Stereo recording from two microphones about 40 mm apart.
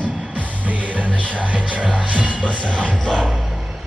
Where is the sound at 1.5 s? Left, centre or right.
Right.